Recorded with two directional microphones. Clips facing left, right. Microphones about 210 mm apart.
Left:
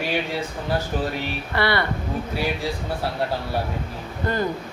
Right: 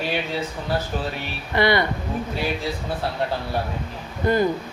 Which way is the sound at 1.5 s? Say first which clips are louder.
Right 4 dB; 15° right (ahead or behind).